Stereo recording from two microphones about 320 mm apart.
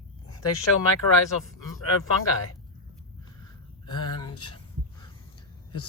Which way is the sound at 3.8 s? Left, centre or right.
Centre.